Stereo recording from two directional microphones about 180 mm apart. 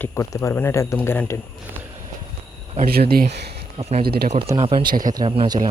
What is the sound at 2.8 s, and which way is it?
Speech, 55° right (ahead or behind).